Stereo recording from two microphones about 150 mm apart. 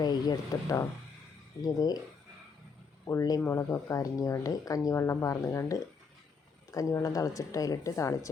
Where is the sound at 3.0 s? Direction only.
20° left (ahead or behind).